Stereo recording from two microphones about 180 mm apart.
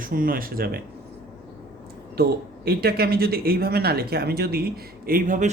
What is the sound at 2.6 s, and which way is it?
Speech, 60° right (ahead or behind).